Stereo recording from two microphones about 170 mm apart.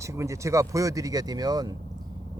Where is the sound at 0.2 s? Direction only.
15° right (ahead or behind).